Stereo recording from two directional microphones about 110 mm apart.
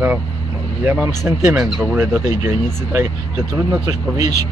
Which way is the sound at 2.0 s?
20° right (ahead or behind).